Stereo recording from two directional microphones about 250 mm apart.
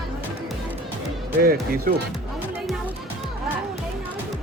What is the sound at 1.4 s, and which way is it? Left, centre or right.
Speech, right.